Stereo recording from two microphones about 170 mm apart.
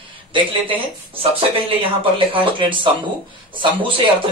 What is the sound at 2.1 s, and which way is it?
Speech, 30° right (ahead or behind).